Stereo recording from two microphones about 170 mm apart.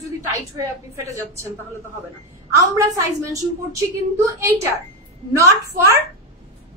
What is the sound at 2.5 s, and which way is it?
A woman's voice, 20° right (ahead or behind).